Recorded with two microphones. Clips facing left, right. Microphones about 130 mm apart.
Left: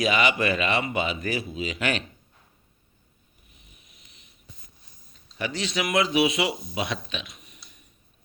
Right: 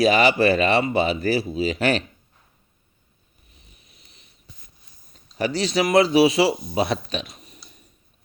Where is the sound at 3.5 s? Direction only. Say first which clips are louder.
Right 2 dB; 35° right (ahead or behind).